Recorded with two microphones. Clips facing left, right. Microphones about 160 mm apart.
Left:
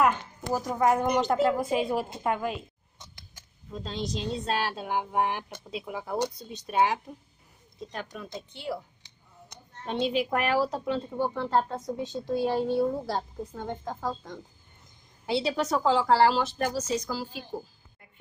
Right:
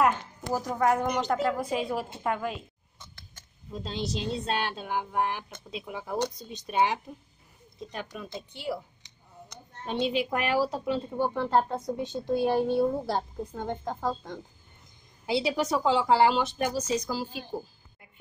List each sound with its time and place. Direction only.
0.0 s a woman's voice: 10° right (ahead or behind)
0.7 s a woman's voice: 15° left (ahead or behind)
3.7 s a woman's voice: 5° right (ahead or behind)
9.8 s a woman's voice: centre (ahead or behind)
16.2 s a woman's voice: 15° right (ahead or behind)